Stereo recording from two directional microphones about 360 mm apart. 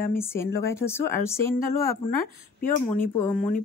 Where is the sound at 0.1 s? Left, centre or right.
Centre.